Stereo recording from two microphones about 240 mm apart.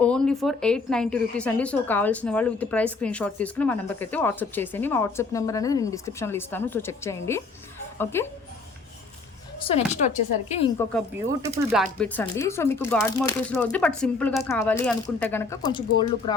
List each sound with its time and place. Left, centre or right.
0.0 s a woman's voice: centre
9.6 s speech: left
10.8 s a woman's voice: centre